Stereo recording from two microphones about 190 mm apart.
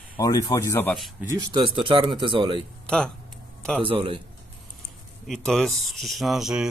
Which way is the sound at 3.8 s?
25° right (ahead or behind).